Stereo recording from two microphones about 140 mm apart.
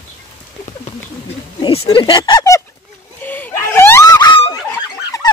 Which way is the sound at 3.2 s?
15° left (ahead or behind).